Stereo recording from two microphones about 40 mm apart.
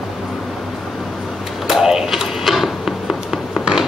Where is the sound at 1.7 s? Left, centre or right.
Centre.